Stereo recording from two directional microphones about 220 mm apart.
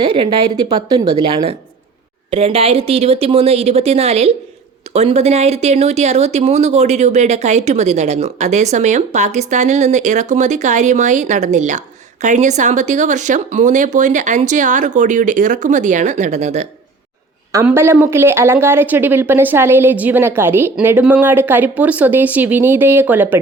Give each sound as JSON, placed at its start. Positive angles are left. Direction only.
{"t": 0.0, "sound": "a woman's voice", "side_deg": -20}
{"t": 17.5, "sound": "a woman's voice", "side_deg": -10}